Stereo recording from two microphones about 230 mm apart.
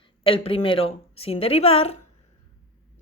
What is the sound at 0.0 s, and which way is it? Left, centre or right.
A woman's voice, left.